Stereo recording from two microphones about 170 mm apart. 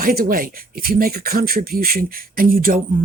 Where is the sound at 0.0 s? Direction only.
60° right (ahead or behind).